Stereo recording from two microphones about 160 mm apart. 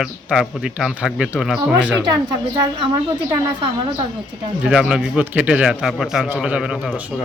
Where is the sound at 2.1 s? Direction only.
25° right (ahead or behind).